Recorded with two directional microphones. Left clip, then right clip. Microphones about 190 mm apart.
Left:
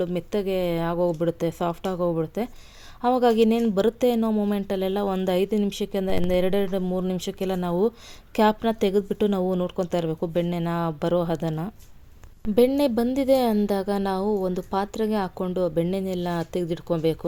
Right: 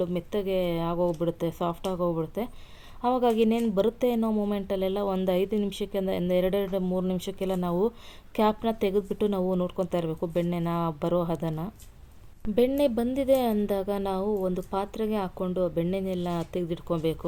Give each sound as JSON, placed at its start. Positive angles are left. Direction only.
{"t": 0.0, "sound": "a woman's voice", "side_deg": 35}